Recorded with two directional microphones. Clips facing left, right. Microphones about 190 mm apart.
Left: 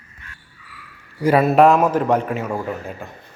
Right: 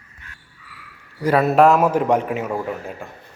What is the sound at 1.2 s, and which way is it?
A man's voice, centre (ahead or behind).